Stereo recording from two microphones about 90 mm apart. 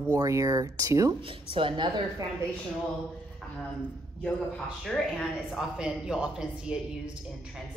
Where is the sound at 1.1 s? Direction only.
80° right; by 2.0 s 60° right (ahead or behind).